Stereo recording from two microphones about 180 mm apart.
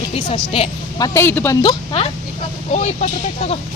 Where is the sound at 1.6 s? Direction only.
30° left (ahead or behind).